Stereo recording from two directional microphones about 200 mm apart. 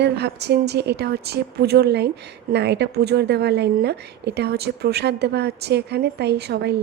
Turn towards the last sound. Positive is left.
turn(degrees=-55)  # may be behind; listen again after turning